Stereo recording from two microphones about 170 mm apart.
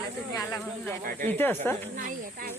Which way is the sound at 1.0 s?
55° right (ahead or behind).